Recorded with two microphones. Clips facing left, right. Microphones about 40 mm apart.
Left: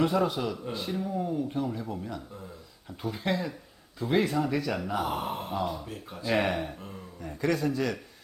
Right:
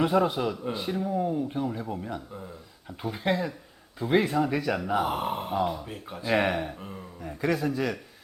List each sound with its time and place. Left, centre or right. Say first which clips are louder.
0.0 s speech: right 2 dB; centre